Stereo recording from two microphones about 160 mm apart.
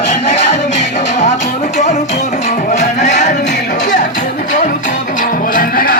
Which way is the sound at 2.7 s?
45° left (ahead or behind).